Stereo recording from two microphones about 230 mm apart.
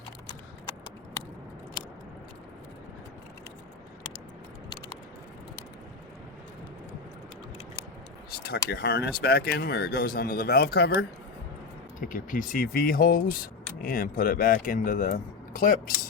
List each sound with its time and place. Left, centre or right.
8.3 s speech: left